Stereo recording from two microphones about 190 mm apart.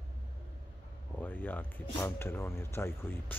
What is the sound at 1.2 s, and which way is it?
Speech, 10° left (ahead or behind).